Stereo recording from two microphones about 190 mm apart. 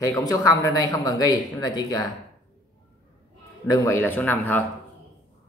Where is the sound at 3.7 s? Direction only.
15° left (ahead or behind).